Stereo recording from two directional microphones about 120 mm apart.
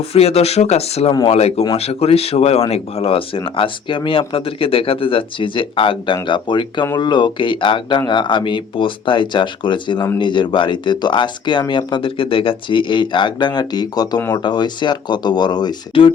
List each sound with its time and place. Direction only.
0.1 s speech: 60° left (ahead or behind); by 16.1 s 40° left (ahead or behind)